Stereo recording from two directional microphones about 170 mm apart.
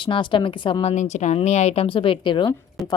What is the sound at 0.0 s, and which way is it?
A woman's voice, 30° left (ahead or behind).